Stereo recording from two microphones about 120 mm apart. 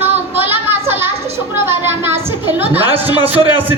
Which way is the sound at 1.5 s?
20° right (ahead or behind).